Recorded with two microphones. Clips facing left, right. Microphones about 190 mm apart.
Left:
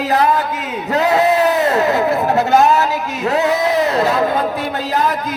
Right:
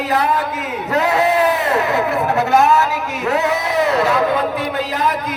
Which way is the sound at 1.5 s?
40° left (ahead or behind).